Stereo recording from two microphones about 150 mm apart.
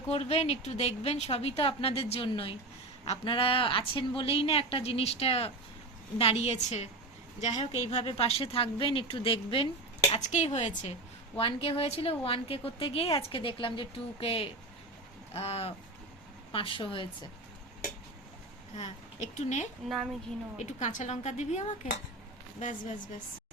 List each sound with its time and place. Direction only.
0.1 s a woman's voice: 45° left (ahead or behind)
10.1 s a woman's voice: 55° left (ahead or behind)
11.3 s a woman's voice: 40° left (ahead or behind)
18.8 s a woman's voice: 50° left (ahead or behind)